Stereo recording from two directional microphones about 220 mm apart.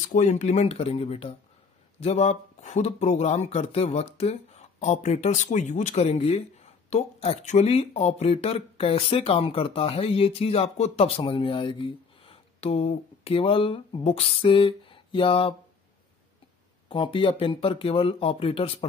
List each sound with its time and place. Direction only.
0.1 s speech: 30° left (ahead or behind)
16.9 s speech: 25° left (ahead or behind)